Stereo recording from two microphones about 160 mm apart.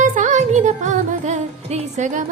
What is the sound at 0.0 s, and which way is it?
Music, 55° right (ahead or behind).